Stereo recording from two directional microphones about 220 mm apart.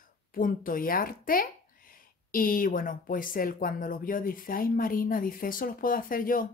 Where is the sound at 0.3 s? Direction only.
40° left (ahead or behind).